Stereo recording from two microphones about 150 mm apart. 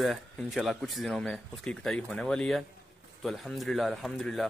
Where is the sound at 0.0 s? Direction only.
Centre (ahead or behind).